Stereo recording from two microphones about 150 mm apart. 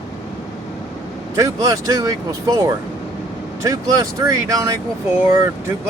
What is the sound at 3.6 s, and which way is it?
Speech, 20° right (ahead or behind).